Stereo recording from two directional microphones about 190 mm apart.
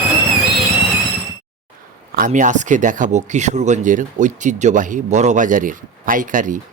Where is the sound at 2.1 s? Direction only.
45° right (ahead or behind).